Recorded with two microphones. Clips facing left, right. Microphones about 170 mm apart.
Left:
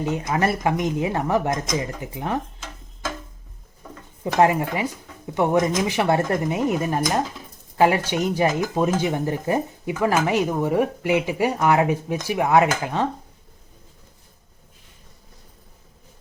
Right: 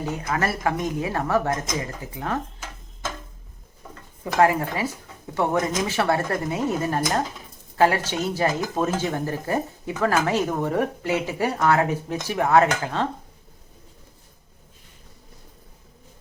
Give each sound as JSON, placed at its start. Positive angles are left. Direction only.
{"t": 0.0, "sound": "speech", "side_deg": 20}
{"t": 4.2, "sound": "speech", "side_deg": 20}